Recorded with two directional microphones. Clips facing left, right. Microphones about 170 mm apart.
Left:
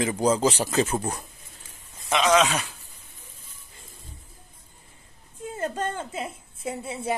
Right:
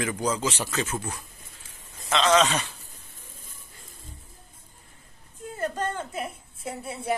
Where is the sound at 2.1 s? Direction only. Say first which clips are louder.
Left 1 dB; 10° left (ahead or behind).